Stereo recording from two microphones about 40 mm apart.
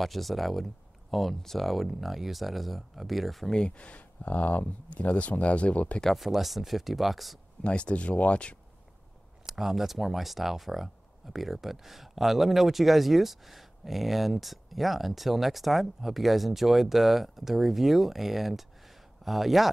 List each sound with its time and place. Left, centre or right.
0.0 s speech: centre
3.4 s speech: left
6.0 s speech: centre
7.6 s speech: left
9.5 s speech: centre